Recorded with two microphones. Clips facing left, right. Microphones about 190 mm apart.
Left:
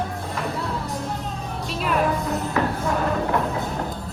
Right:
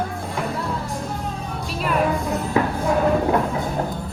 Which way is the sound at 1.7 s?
Centre (ahead or behind).